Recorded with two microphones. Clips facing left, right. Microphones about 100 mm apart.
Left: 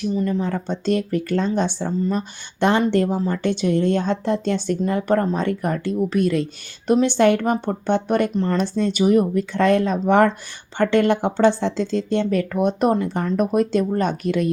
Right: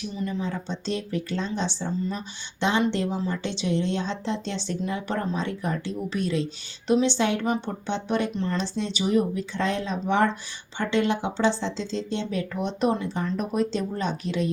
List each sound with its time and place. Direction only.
0.0 s speech: 50° left (ahead or behind)